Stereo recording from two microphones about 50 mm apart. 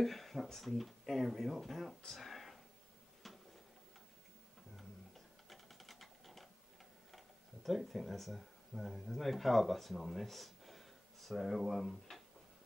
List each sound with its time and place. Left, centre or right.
0.0 s speech: centre
3.2 s tick-tock: centre
4.7 s typing: centre
7.1 s speech: centre